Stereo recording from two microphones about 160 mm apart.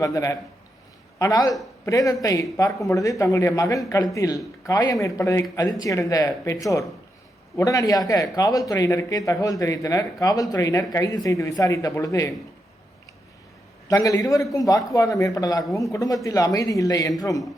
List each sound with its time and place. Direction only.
0.0 s speech: 20° left (ahead or behind)
13.8 s speech: 20° left (ahead or behind)